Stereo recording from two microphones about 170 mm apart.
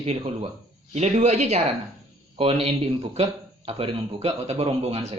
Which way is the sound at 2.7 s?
40° right (ahead or behind).